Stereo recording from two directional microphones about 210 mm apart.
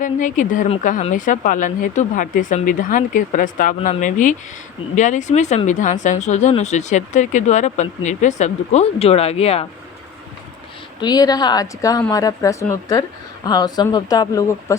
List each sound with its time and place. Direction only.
0.0 s speech: 40° left (ahead or behind)
11.0 s speech: 20° left (ahead or behind)